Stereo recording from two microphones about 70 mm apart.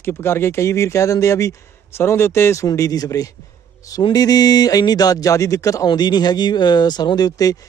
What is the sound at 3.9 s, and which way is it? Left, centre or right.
Speech, left.